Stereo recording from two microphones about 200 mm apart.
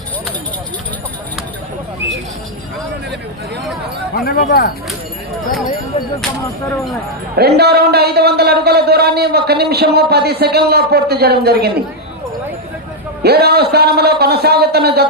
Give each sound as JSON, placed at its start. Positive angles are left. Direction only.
{"t": 4.1, "sound": "speech", "side_deg": 50}
{"t": 7.3, "sound": "a man's voice", "side_deg": -55}
{"t": 13.2, "sound": "a man's voice", "side_deg": -50}